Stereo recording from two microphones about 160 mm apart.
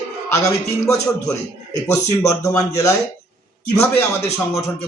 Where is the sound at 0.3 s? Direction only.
15° left (ahead or behind).